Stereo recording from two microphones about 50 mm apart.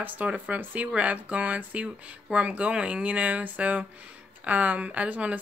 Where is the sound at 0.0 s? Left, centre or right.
Right.